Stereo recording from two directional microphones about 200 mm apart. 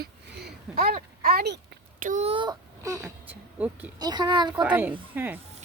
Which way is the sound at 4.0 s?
20° right (ahead or behind).